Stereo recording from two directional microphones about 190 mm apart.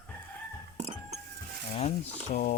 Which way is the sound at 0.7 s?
35° right (ahead or behind).